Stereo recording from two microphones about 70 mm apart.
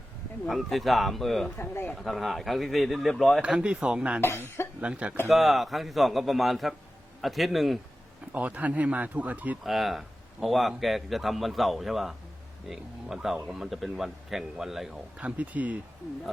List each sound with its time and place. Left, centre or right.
0.4 s speech: centre
1.5 s speech: left
2.0 s speech: centre
3.4 s speech: centre
4.2 s speech: left
4.8 s speech: centre
5.3 s speech: centre
8.3 s speech: right
9.6 s speech: centre
15.2 s speech: right